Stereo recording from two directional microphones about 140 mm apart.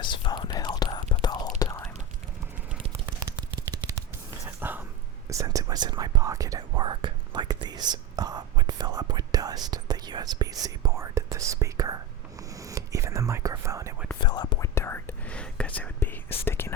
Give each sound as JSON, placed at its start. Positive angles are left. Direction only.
{"t": 0.0, "sound": "whispering", "side_deg": 30}
{"t": 3.2, "sound": "a sound", "side_deg": -25}
{"t": 4.4, "sound": "whispering", "side_deg": -15}
{"t": 14.2, "sound": "whispering", "side_deg": 30}
{"t": 14.6, "sound": "whispering", "side_deg": 15}